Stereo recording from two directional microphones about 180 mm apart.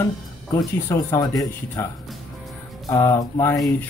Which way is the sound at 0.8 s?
20° left (ahead or behind).